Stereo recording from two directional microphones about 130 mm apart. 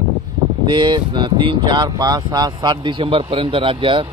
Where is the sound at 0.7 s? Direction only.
35° right (ahead or behind).